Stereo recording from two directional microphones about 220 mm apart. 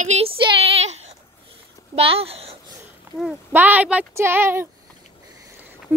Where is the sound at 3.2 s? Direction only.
10° right (ahead or behind).